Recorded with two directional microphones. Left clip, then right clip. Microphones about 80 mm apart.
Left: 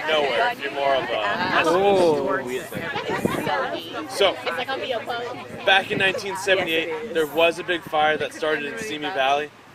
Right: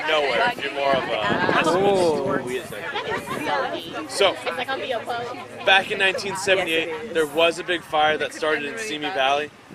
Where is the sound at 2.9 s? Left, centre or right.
Left.